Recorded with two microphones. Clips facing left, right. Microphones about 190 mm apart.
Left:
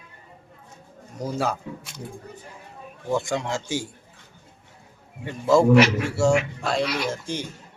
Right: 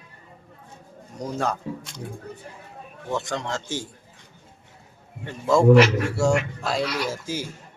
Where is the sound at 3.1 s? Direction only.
10° left (ahead or behind).